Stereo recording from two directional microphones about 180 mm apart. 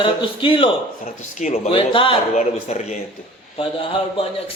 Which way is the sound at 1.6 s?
30° left (ahead or behind).